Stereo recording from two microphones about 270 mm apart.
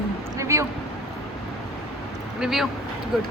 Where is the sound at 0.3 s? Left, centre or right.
Centre.